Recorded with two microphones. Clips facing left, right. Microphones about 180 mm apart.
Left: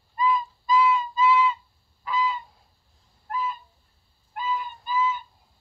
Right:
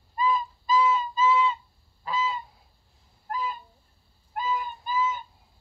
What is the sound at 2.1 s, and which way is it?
Goose, 30° right (ahead or behind).